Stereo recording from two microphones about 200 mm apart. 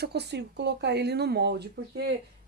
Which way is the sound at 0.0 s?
55° right (ahead or behind).